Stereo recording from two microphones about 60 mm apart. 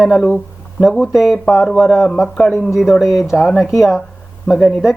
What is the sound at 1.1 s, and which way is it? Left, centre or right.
Speech, centre.